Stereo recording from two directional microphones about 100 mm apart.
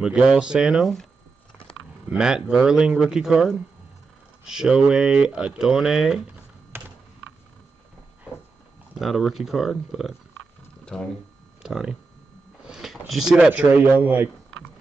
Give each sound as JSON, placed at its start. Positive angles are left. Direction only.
{"t": 0.0, "sound": "speech", "side_deg": -5}
{"t": 2.0, "sound": "speech", "side_deg": -5}
{"t": 8.9, "sound": "speech", "side_deg": 0}
{"t": 11.6, "sound": "speech", "side_deg": -5}
{"t": 12.6, "sound": "a sound", "side_deg": -5}
{"t": 13.5, "sound": "speech", "side_deg": -15}